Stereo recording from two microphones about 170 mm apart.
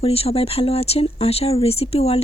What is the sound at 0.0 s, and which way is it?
Speech, 35° left (ahead or behind).